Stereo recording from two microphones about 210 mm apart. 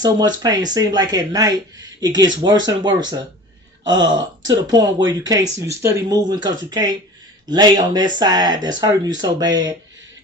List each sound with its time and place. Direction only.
0.0 s speech: 20° right (ahead or behind)